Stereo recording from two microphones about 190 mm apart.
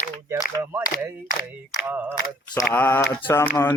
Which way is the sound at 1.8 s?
10° right (ahead or behind).